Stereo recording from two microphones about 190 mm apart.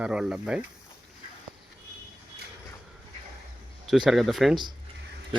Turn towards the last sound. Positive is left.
turn(degrees=0)  # may be behind; listen again after turning